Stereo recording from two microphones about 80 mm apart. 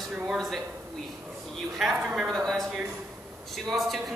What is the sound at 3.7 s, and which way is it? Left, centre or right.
Speech, centre.